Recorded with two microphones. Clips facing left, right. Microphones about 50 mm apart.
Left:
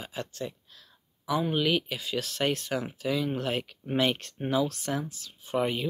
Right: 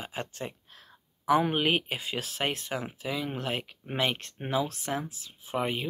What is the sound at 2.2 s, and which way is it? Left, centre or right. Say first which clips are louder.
Speech: left 5 dB; centre.